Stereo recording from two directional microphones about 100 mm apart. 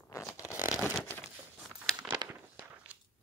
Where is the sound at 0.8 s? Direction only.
15° left (ahead or behind).